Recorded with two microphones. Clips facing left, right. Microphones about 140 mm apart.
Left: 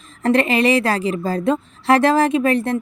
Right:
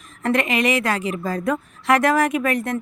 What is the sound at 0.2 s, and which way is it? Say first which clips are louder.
A woman's voice: left 4 dB; 30° left (ahead or behind).